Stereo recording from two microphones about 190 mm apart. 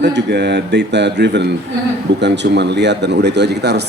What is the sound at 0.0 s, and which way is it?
Speech, 65° right (ahead or behind).